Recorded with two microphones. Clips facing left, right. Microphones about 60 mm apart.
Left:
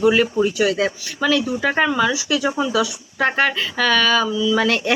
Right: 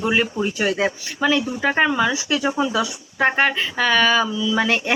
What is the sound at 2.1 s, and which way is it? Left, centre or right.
Speech, right.